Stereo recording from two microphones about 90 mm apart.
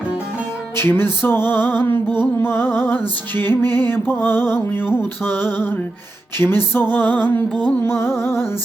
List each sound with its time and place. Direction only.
0.8 s music: 25° left (ahead or behind)